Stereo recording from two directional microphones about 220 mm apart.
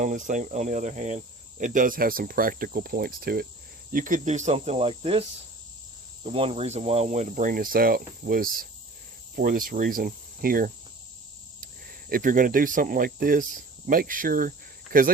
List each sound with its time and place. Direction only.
0.0 s speech: 35° right (ahead or behind)
6.2 s speech: 25° right (ahead or behind)